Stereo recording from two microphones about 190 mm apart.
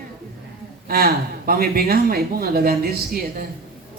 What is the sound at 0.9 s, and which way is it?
Mantra, 50° right (ahead or behind).